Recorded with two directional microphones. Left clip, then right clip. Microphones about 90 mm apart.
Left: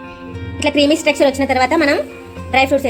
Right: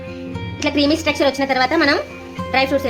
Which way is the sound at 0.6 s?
30° left (ahead or behind).